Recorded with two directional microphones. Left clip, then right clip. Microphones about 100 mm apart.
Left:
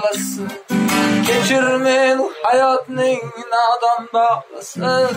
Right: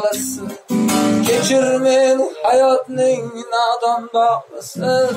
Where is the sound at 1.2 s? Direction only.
25° right (ahead or behind).